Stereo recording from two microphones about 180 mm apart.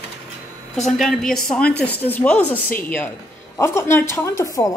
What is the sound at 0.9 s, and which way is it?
A woman's voice, centre (ahead or behind).